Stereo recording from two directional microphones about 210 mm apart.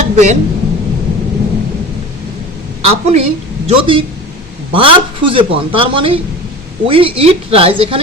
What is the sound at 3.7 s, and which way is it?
A woman's voice, 25° right (ahead or behind).